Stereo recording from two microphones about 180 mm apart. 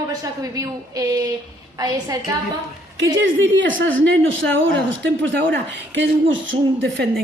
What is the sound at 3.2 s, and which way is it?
A woman's voice, 90° right.